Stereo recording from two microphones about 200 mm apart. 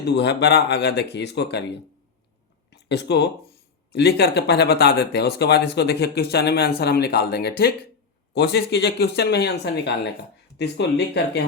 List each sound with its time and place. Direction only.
0.0 s speech: 60° left (ahead or behind)
2.6 s a sound: 55° left (ahead or behind)
3.9 s speech: 55° left (ahead or behind)